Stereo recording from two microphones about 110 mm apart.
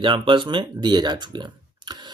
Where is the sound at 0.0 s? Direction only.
45° right (ahead or behind).